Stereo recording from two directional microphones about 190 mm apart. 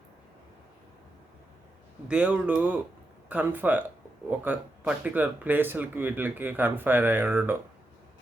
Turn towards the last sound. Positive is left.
turn(degrees=-10)  # may be behind; listen again after turning